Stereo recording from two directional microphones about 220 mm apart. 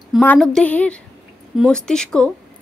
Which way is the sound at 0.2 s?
5° left (ahead or behind).